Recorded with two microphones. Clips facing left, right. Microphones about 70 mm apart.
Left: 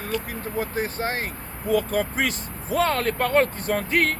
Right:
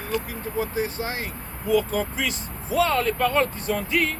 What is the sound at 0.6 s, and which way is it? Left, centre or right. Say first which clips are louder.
Speech: even; left.